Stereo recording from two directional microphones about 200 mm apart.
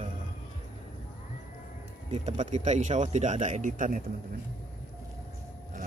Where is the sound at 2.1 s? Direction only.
35° right (ahead or behind).